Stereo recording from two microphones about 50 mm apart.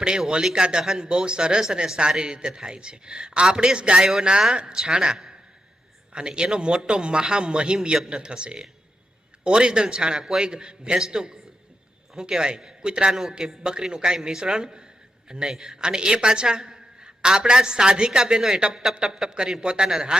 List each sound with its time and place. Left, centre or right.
0.3 s a woman's voice: centre